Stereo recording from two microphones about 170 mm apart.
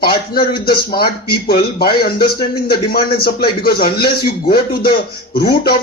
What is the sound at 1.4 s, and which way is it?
Speech, 65° left (ahead or behind).